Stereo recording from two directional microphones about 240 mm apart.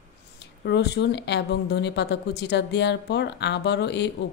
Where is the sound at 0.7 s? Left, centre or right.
Left.